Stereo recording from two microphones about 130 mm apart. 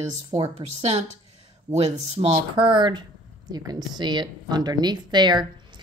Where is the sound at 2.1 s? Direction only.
40° right (ahead or behind).